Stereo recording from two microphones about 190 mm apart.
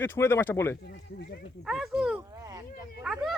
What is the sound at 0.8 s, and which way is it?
Speech, 60° left (ahead or behind).